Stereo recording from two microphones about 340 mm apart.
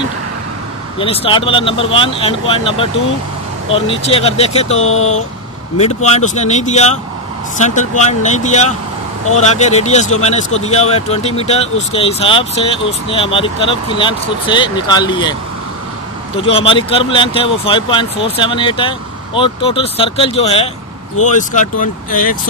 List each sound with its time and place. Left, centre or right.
0.9 s speech: centre
6.0 s speech: centre
16.3 s speech: centre